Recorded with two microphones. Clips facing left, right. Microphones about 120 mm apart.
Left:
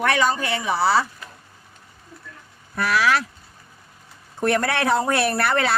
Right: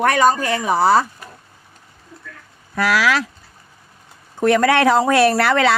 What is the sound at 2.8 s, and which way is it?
Speech, 90° right.